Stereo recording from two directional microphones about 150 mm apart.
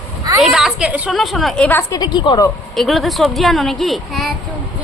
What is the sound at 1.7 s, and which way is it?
Speech, 15° left (ahead or behind).